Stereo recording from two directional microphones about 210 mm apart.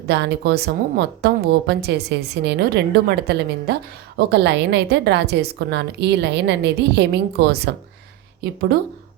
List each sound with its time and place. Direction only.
0.1 s a woman's voice: 50° right (ahead or behind)